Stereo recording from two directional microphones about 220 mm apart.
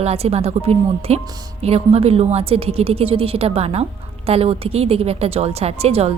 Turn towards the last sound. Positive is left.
turn(degrees=-30)  # may be behind; listen again after turning